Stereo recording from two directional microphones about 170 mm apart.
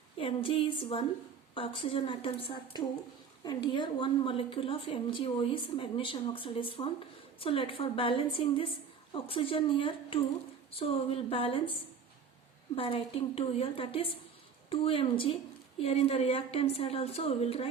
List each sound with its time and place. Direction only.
0.2 s a woman's voice: 30° left (ahead or behind)
12.7 s a woman's voice: 35° left (ahead or behind)